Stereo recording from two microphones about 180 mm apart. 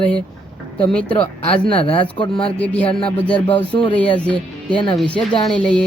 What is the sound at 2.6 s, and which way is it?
Speech, 10° left (ahead or behind).